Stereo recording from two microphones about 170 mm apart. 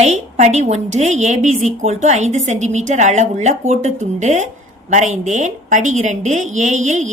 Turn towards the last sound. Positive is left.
turn(degrees=-45)  # may be behind; listen again after turning